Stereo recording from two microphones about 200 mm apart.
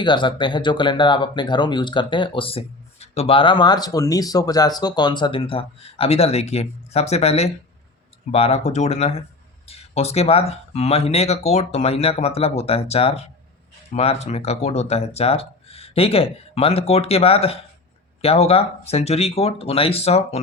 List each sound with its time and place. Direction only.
0.0 s speech: 25° left (ahead or behind)